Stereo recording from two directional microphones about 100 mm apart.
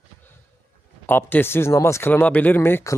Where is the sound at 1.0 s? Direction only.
20° left (ahead or behind).